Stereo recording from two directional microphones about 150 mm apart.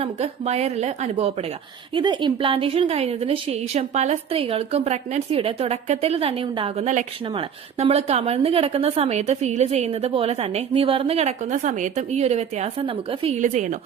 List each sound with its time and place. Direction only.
0.0 s a woman's voice: 45° right (ahead or behind)
1.9 s a woman's voice: 30° right (ahead or behind)
13.4 s a woman's voice: 55° right (ahead or behind)